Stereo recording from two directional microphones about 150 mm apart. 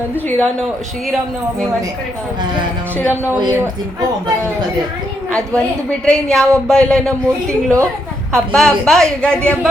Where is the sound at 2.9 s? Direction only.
15° left (ahead or behind).